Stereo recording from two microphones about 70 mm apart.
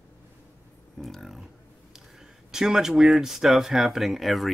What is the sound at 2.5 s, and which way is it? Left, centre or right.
Speech, centre.